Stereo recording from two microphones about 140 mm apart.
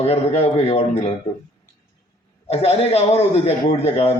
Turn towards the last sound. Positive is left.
turn(degrees=50)  # may be behind; listen again after turning